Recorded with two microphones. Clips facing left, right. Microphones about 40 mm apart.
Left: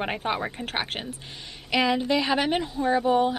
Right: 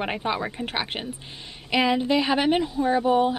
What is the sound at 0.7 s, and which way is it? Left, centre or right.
A woman's voice, centre.